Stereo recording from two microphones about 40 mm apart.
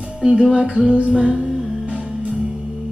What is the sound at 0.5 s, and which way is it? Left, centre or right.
Music, right.